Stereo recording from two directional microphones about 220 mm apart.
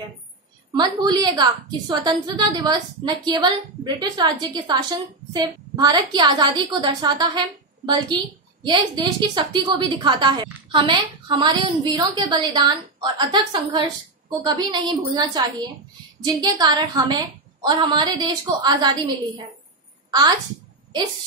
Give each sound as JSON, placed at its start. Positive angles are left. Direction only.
{"t": 0.7, "sound": "a woman's voice", "side_deg": -20}